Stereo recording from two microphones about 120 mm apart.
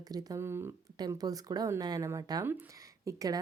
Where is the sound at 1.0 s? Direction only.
30° right (ahead or behind).